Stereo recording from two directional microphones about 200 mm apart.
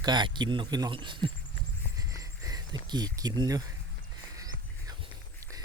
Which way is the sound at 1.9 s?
15° right (ahead or behind).